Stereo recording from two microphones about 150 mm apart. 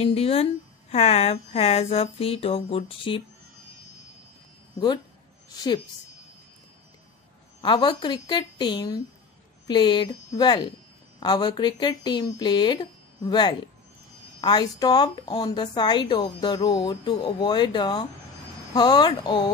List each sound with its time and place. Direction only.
0.0 s a woman's voice: 40° left (ahead or behind)
4.7 s a woman's voice: 30° left (ahead or behind)
7.6 s a woman's voice: 30° left (ahead or behind)